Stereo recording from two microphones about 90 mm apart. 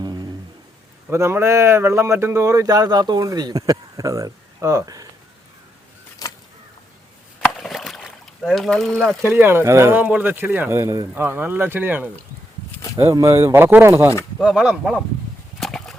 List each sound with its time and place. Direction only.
0.0 s a sound: 50° right (ahead or behind)
1.1 s speech: 30° right (ahead or behind)
6.2 s a sound: 45° left (ahead or behind)
7.5 s boat: centre (ahead or behind)
9.2 s speech: 25° right (ahead or behind)
10.0 s speech: 15° right (ahead or behind)
13.1 s speech: 30° right (ahead or behind)
14.4 s speech: 10° right (ahead or behind)
15.6 s horse: 5° left (ahead or behind)